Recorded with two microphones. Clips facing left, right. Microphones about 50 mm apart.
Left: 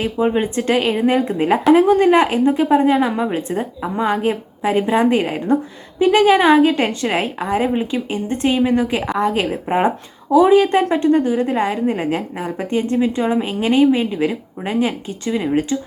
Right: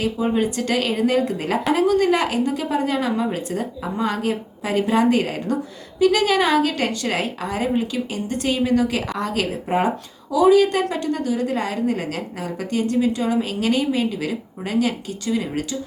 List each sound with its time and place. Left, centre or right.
0.0 s a woman's voice: left